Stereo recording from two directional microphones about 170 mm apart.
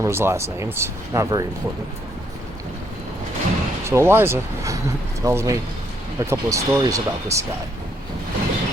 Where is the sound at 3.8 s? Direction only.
15° right (ahead or behind).